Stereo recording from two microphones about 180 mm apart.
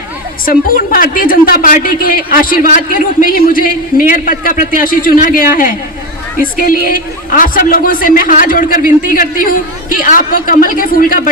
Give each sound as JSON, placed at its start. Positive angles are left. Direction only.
{"t": 0.4, "sound": "a woman's voice", "side_deg": 50}